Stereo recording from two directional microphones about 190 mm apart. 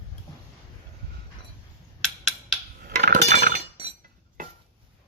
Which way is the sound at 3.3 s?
40° right (ahead or behind).